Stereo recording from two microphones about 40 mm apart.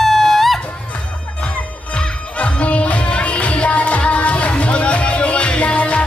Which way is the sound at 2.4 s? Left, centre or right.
Left.